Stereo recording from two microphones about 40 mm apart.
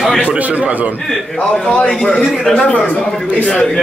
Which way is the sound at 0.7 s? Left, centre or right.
Right.